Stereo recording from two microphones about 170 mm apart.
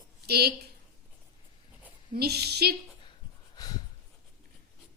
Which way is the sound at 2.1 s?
70° right (ahead or behind).